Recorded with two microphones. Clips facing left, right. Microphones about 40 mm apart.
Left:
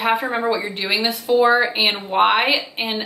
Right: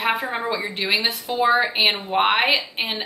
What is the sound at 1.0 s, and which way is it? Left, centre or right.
Speech, centre.